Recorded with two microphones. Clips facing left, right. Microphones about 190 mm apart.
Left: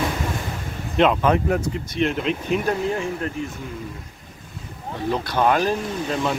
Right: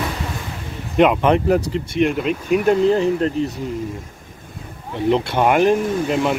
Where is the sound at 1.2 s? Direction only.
25° right (ahead or behind).